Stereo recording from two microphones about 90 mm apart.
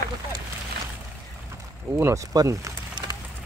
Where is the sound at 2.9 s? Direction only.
50° right (ahead or behind).